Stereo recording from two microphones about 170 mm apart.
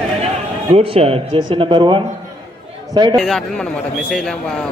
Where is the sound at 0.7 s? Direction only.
35° right (ahead or behind).